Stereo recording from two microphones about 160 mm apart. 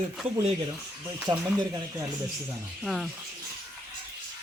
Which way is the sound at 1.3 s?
35° right (ahead or behind).